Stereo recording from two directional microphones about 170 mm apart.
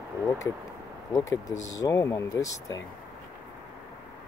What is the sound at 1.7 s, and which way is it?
Speech, 20° left (ahead or behind).